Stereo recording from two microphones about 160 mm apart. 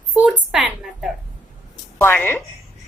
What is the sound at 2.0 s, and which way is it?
Speech, 15° left (ahead or behind).